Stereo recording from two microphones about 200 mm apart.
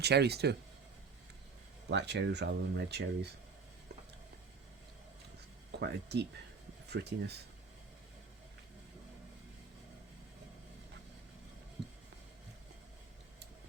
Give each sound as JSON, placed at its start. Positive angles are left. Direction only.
{"t": 0.0, "sound": "speech", "side_deg": -55}
{"t": 1.9, "sound": "speech", "side_deg": -60}
{"t": 5.8, "sound": "speech", "side_deg": -55}